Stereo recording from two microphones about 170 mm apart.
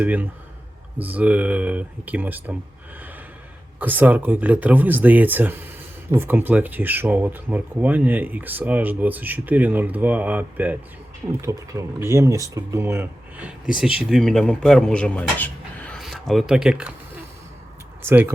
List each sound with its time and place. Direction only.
0.0 s speech: 10° right (ahead or behind)
3.8 s speech: 10° right (ahead or behind)
18.0 s speech: 10° right (ahead or behind)